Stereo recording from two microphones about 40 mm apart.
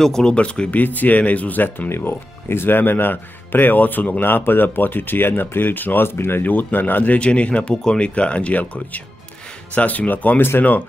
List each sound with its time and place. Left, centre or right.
0.0 s speech: centre
0.3 s speech: left
0.7 s speech: left
1.9 s speech: left
4.2 s speech: left
6.0 s speech: left
6.4 s speech: left
7.2 s speech: left
8.1 s speech: left
9.8 s speech: left